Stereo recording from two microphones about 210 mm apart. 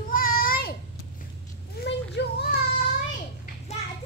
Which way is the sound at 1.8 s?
50° left (ahead or behind).